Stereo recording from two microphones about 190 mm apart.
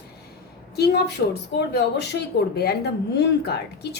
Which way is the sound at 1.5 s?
60° left (ahead or behind).